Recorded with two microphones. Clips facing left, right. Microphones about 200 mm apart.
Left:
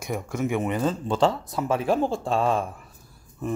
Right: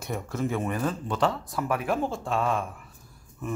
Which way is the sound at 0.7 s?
25° left (ahead or behind).